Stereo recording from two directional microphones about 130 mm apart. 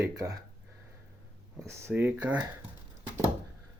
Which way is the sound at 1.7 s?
20° right (ahead or behind).